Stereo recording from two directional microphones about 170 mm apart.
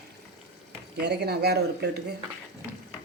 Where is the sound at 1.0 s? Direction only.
75° right (ahead or behind).